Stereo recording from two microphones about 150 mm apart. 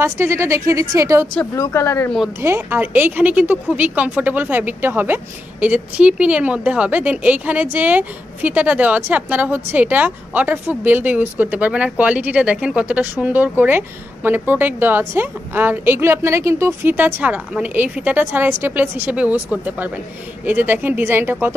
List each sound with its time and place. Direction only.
0.0 s a woman's voice: 15° right (ahead or behind)
1.5 s speech: 20° left (ahead or behind)
2.4 s a woman's voice: 15° right (ahead or behind)